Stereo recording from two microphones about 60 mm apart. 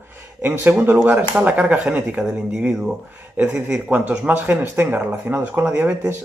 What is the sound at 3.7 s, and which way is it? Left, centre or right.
Speech, right.